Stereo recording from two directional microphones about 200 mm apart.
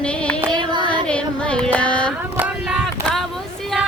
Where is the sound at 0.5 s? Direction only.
25° right (ahead or behind).